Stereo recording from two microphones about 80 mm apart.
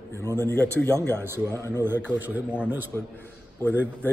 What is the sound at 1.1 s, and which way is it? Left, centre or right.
A man's voice, right.